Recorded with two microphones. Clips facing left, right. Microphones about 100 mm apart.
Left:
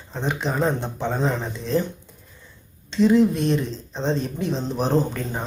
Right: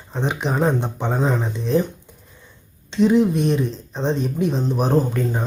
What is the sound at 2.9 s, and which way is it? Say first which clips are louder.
Speech: right 1 dB; 15° right (ahead or behind).